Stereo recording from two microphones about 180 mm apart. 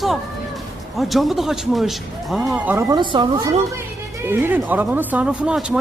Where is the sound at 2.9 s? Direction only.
25° right (ahead or behind).